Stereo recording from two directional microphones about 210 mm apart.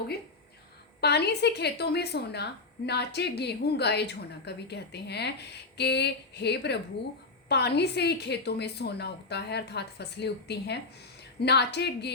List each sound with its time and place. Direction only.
1.0 s a woman's voice: 50° left (ahead or behind)